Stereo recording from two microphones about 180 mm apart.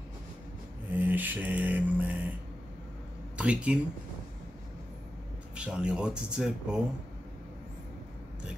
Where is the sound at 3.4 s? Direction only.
5° right (ahead or behind).